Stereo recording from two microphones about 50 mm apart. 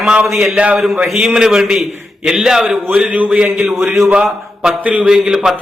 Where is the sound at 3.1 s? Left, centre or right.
Right.